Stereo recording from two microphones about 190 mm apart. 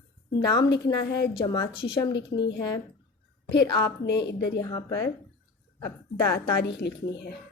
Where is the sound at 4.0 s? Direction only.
65° left (ahead or behind).